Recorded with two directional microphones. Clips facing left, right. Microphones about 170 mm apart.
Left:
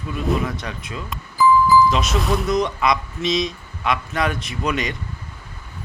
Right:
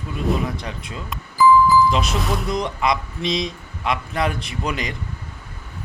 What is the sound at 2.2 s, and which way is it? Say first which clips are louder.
Speech: left 3 dB; centre (ahead or behind).